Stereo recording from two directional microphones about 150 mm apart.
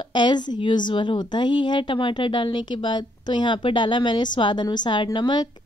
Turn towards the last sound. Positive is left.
turn(degrees=30)  # may be behind; listen again after turning